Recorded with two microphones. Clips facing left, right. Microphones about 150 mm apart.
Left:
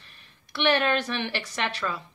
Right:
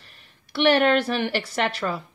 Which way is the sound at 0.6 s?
35° right (ahead or behind).